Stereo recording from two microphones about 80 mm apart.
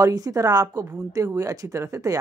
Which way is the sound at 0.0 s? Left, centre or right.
Right.